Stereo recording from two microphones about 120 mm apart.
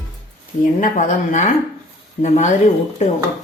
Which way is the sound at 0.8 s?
90° left.